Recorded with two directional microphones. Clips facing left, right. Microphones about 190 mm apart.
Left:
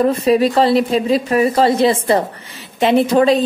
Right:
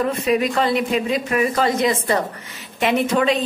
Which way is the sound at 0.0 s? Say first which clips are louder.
Left 6 dB; 35° left (ahead or behind).